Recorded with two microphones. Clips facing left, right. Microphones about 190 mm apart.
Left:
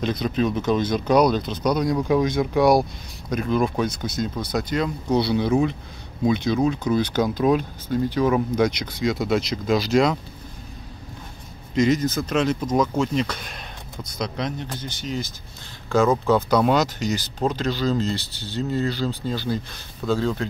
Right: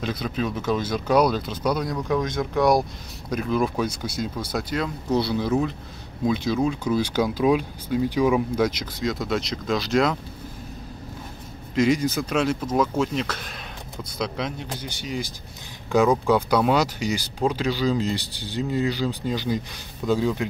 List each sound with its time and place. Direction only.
0.0 s speech: 5° right (ahead or behind)
11.7 s speech: 10° right (ahead or behind)